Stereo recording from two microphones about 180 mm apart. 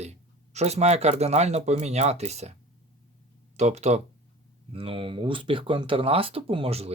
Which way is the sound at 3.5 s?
40° right (ahead or behind).